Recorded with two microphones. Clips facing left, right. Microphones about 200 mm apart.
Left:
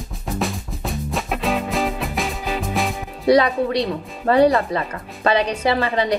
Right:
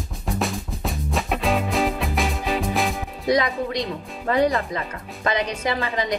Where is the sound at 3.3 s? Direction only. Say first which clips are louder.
Left 6 dB; 35° left (ahead or behind).